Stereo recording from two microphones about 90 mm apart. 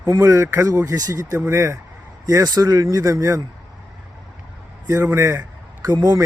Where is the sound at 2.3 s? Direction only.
45° right (ahead or behind).